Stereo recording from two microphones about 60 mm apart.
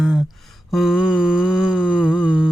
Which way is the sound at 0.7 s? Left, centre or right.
Centre.